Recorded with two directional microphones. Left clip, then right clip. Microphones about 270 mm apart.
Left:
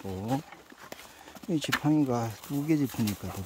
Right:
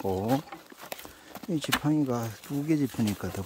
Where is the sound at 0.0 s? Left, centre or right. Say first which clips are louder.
Right 6 dB; centre.